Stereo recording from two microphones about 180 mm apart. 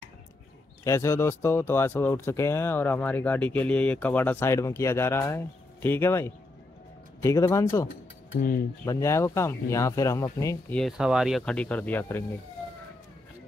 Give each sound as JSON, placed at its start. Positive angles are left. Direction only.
{"t": 0.8, "sound": "speech", "side_deg": 15}
{"t": 10.7, "sound": "speech", "side_deg": 0}